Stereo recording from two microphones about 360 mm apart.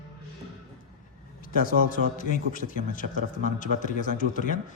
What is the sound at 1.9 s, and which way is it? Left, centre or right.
A man's voice, left.